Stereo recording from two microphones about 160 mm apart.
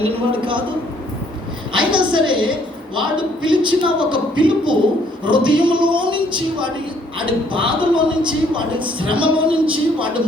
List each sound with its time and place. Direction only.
0.0 s a man's voice: 35° right (ahead or behind)
1.7 s a man's voice: 30° right (ahead or behind)